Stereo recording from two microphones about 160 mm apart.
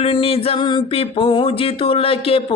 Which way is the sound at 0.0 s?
35° left (ahead or behind).